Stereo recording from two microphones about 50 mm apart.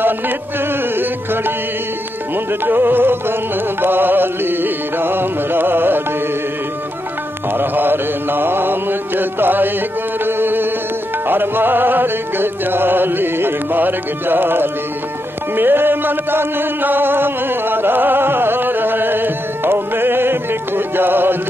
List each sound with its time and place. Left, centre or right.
0.9 s music: right
7.5 s music: right
10.2 s a sound: right
11.2 s music: right